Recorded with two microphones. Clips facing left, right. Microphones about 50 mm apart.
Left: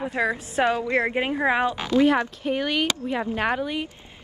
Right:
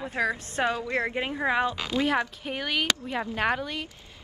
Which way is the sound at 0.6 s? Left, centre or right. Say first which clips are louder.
Left 5 dB; left.